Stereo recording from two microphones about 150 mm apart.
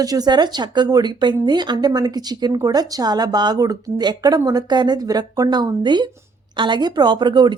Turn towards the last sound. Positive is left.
turn(degrees=-30)  # may be behind; listen again after turning